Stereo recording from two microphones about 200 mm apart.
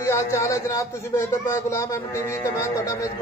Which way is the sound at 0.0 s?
15° left (ahead or behind).